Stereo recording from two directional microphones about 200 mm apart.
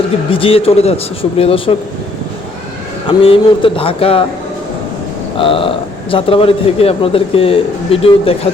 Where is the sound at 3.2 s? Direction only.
25° left (ahead or behind).